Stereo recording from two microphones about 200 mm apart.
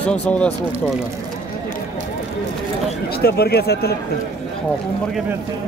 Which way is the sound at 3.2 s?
55° left (ahead or behind).